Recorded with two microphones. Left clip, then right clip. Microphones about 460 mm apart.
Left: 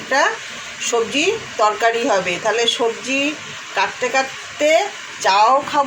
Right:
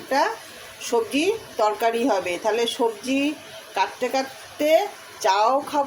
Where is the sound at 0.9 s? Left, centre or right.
Right.